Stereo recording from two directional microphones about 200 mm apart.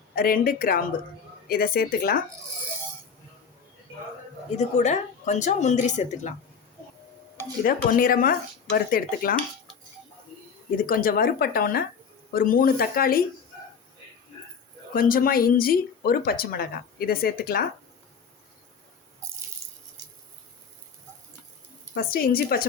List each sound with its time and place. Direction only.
0.2 s speech: 45° left (ahead or behind)
4.5 s speech: 35° left (ahead or behind)
7.6 s speech: 45° left (ahead or behind)
10.8 s speech: 45° left (ahead or behind)
14.9 s speech: 45° left (ahead or behind)
21.9 s speech: 50° left (ahead or behind)